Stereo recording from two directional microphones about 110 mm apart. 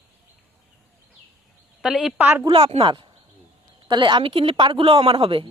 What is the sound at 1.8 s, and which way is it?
Speech, 10° right (ahead or behind).